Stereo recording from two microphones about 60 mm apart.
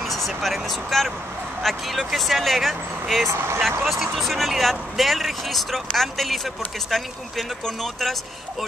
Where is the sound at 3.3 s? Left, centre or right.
Right.